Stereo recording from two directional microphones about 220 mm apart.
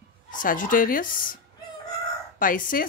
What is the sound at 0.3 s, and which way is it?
Speech, 40° left (ahead or behind).